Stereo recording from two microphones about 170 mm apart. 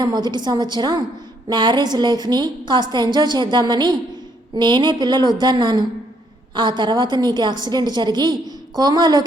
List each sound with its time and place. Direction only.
0.0 s a woman's voice: 25° right (ahead or behind)